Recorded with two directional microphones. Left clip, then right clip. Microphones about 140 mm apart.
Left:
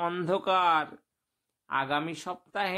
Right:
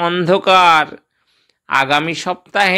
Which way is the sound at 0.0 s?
20° right (ahead or behind).